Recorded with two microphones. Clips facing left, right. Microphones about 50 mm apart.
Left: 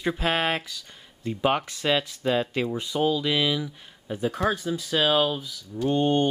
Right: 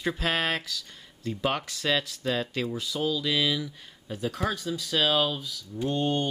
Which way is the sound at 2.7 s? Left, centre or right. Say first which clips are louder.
Left 4 dB; left.